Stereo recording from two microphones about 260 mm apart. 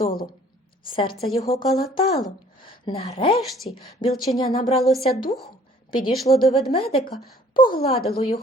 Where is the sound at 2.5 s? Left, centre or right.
Left.